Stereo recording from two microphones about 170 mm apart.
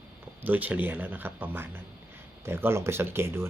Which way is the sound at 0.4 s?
10° right (ahead or behind).